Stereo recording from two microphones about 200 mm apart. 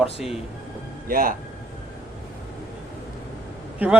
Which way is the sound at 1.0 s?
45° right (ahead or behind).